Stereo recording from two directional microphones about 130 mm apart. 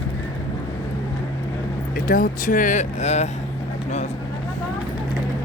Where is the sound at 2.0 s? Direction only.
90° left; by 3.3 s 60° left (ahead or behind).